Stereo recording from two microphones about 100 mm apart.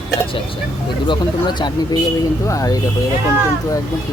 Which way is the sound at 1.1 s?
50° left (ahead or behind).